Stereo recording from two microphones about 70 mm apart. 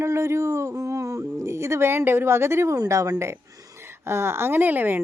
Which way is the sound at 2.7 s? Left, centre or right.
Right.